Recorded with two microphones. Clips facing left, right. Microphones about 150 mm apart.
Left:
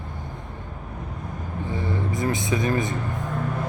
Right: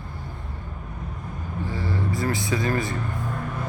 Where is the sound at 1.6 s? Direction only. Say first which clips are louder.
Left 1 dB; 20° left (ahead or behind).